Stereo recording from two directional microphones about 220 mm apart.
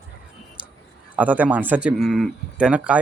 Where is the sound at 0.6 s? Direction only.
5° right (ahead or behind).